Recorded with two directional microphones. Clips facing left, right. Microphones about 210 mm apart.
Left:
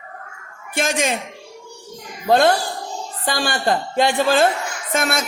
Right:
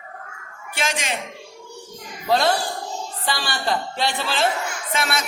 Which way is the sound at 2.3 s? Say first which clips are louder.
Left 4 dB; 50° left (ahead or behind).